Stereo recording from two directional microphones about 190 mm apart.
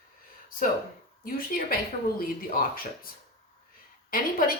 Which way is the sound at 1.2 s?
50° left (ahead or behind).